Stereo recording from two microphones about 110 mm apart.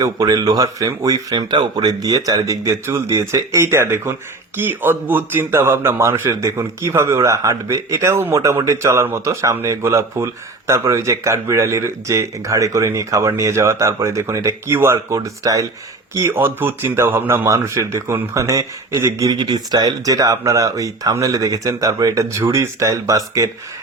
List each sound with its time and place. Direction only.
0.0 s a man's voice: 35° right (ahead or behind)